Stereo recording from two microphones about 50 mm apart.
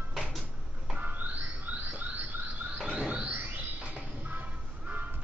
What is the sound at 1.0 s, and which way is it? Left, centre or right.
Music, right.